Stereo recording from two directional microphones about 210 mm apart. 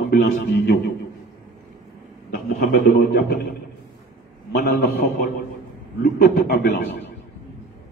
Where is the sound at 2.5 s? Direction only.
45° left (ahead or behind).